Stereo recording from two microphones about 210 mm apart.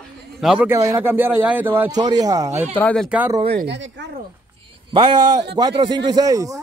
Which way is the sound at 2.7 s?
5° left (ahead or behind).